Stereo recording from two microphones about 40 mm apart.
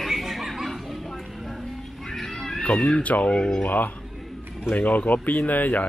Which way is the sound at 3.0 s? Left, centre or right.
Left.